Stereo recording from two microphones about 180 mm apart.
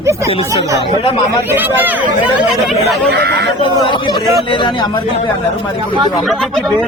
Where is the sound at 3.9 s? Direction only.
25° left (ahead or behind).